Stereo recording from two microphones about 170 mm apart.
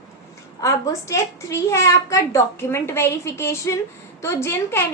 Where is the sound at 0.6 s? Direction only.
20° left (ahead or behind).